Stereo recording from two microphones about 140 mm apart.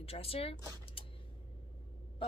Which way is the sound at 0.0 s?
45° left (ahead or behind).